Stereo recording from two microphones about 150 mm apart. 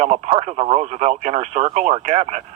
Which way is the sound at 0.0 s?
45° right (ahead or behind).